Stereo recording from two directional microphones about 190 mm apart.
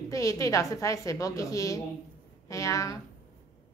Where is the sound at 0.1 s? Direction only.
15° left (ahead or behind).